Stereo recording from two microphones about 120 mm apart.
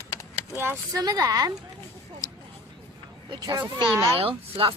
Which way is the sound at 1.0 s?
30° right (ahead or behind).